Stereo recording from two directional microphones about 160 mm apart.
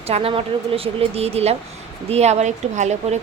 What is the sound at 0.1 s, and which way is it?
A woman's voice, 35° right (ahead or behind).